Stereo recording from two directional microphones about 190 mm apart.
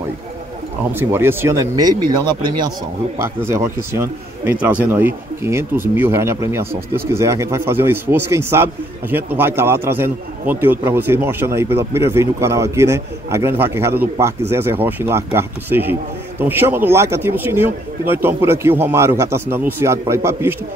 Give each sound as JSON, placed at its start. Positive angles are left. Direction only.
{"t": 0.9, "sound": "a man's voice", "side_deg": -10}